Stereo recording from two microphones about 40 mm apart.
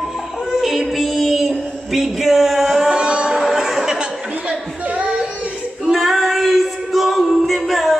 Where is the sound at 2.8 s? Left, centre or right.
Right.